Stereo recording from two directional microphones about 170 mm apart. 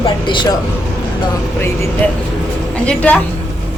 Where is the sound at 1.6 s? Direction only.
15° left (ahead or behind).